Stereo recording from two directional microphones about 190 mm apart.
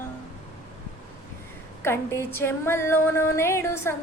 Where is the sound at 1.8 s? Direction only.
15° left (ahead or behind).